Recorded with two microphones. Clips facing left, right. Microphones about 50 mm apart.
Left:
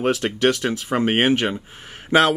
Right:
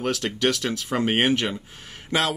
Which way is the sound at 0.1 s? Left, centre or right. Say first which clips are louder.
Left 4 dB; left.